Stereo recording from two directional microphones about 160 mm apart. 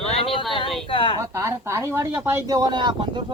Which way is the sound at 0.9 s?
35° left (ahead or behind).